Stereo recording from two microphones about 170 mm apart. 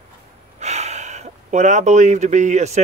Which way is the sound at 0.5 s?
40° right (ahead or behind).